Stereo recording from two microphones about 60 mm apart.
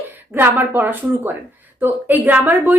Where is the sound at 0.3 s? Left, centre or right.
Right.